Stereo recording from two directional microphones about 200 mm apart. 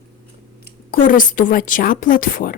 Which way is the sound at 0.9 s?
40° left (ahead or behind).